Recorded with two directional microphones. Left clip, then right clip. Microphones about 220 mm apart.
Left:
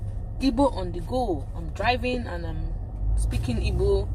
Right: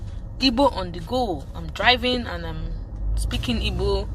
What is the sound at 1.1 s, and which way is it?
Speech, 25° right (ahead or behind).